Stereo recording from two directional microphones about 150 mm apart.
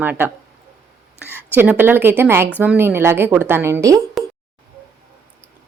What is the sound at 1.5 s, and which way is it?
A woman's voice, 10° right (ahead or behind).